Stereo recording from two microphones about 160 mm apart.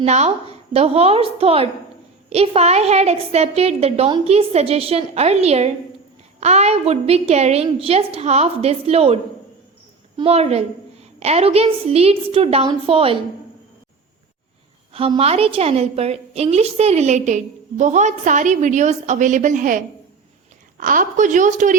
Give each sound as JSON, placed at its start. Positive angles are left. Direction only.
{"t": 0.0, "sound": "a woman's voice", "side_deg": -45}
{"t": 10.2, "sound": "a woman's voice", "side_deg": -40}
{"t": 14.9, "sound": "a woman's voice", "side_deg": -35}